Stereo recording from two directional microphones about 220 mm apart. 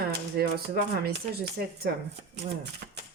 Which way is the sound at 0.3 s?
45° right (ahead or behind).